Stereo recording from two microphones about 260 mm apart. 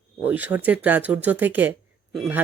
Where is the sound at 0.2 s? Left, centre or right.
Centre.